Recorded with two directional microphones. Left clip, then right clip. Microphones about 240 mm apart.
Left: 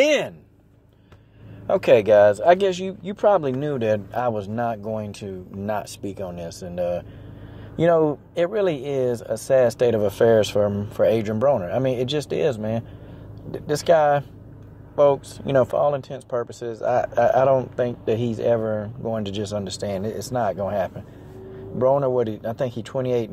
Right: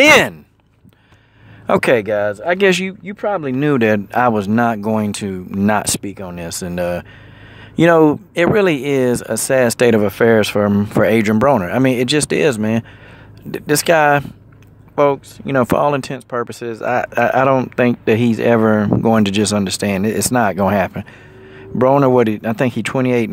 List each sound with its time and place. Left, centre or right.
0.0 s speech: right
1.7 s speech: right
3.1 s speech: centre
15.6 s speech: right